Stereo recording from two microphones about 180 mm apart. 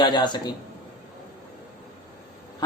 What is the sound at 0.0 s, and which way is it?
Speech, 25° left (ahead or behind).